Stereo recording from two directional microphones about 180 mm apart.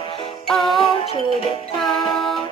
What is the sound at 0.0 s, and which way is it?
Music, 30° left (ahead or behind).